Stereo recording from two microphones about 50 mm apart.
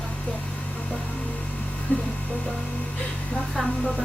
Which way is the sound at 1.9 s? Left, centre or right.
Left.